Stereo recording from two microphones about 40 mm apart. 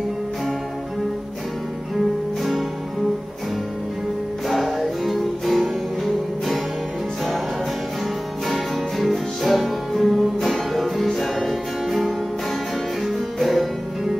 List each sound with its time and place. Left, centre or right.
4.5 s music: centre
8.5 s music: centre